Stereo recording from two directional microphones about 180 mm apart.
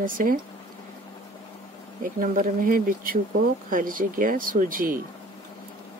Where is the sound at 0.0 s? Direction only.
50° right (ahead or behind).